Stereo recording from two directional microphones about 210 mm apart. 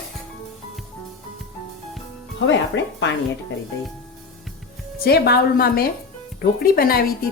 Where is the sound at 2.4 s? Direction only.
60° left (ahead or behind).